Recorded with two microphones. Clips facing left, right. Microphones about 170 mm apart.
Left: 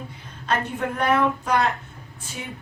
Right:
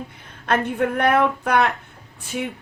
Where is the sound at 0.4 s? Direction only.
55° right (ahead or behind).